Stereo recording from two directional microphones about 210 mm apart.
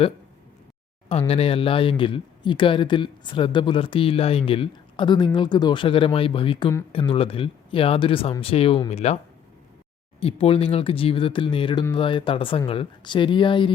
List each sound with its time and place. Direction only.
1.3 s speech: 30° left (ahead or behind)
10.2 s speech: 25° left (ahead or behind)